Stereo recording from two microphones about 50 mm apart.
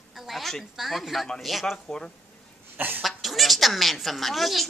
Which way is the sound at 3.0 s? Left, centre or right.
Centre.